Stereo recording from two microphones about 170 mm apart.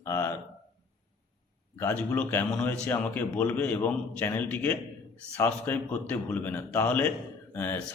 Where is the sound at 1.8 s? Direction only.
15° left (ahead or behind).